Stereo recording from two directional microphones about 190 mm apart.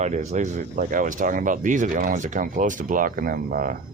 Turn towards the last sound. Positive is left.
turn(degrees=-45)  # may be behind; listen again after turning